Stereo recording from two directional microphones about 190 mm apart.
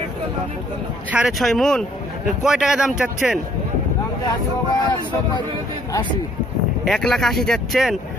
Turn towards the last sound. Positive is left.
turn(degrees=0)  # may be behind; listen again after turning